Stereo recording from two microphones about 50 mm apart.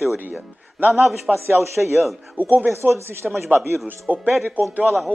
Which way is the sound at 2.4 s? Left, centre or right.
Right.